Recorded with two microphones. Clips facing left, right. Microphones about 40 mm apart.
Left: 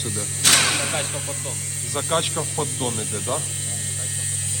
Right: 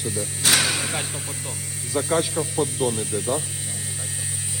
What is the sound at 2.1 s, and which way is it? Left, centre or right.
Speech, left.